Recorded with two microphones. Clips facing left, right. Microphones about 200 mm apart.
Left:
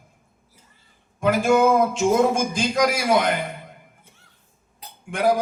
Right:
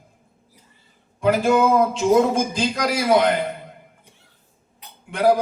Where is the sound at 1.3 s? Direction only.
50° left (ahead or behind).